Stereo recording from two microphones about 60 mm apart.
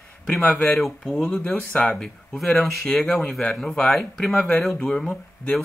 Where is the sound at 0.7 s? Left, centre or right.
Centre.